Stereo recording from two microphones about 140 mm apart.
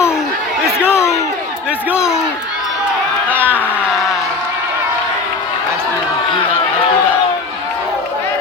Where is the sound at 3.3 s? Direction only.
15° right (ahead or behind).